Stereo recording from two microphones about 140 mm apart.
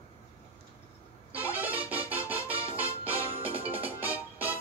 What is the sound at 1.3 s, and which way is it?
Music, 10° right (ahead or behind).